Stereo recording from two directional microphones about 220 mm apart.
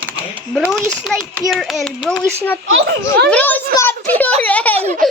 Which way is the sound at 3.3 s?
10° left (ahead or behind).